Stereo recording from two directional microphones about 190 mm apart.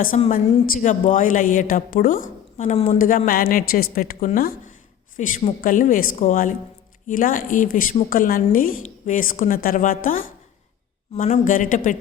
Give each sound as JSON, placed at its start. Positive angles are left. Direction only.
{"t": 0.3, "sound": "a woman's voice", "side_deg": 50}
{"t": 5.1, "sound": "a woman's voice", "side_deg": 40}